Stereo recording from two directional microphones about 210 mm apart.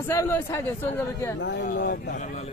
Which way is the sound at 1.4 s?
55° left (ahead or behind).